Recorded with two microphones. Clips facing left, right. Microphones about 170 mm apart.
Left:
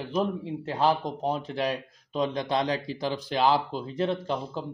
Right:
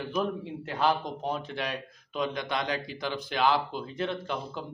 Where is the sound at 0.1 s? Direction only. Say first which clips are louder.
Left 4 dB; 30° left (ahead or behind).